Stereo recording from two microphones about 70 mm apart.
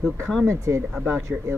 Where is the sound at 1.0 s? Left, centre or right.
Right.